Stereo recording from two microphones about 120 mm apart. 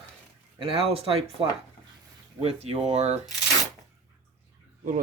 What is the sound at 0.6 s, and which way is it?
Speech, 50° right (ahead or behind).